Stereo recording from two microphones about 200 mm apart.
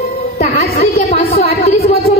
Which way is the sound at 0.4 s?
35° left (ahead or behind).